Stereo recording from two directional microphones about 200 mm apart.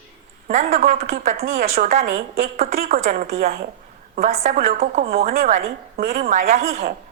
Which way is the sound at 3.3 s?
50° right (ahead or behind).